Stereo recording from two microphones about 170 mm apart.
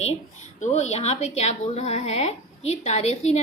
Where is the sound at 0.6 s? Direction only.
40° left (ahead or behind).